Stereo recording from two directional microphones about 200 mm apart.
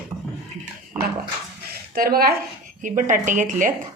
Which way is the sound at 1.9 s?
50° right (ahead or behind).